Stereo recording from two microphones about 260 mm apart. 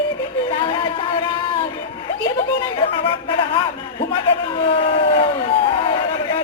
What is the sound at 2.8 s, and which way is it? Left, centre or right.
A man's voice, centre.